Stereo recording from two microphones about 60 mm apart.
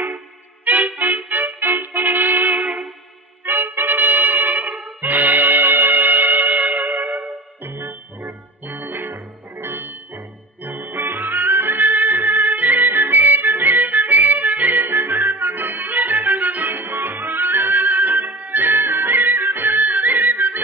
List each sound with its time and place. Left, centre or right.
0.7 s music: right
3.4 s trumpet: right